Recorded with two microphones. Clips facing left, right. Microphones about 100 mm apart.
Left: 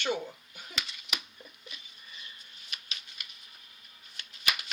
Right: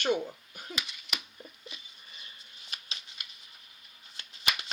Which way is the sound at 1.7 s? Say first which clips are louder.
Right 1 dB; 30° right (ahead or behind).